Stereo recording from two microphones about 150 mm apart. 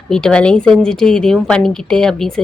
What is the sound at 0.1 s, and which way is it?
A woman's voice, 5° left (ahead or behind).